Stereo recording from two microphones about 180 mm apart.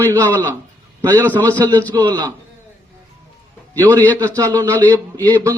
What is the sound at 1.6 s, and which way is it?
Speech, 15° right (ahead or behind).